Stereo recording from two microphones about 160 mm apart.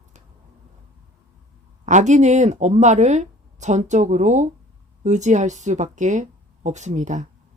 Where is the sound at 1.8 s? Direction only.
50° right (ahead or behind).